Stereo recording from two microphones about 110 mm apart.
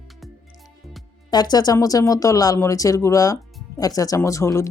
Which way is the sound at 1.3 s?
40° left (ahead or behind).